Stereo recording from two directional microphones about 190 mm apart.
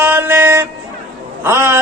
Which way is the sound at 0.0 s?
10° right (ahead or behind).